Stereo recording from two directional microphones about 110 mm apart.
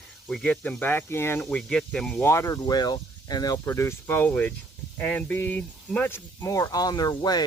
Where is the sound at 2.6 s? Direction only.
40° left (ahead or behind); by 6.2 s 20° left (ahead or behind).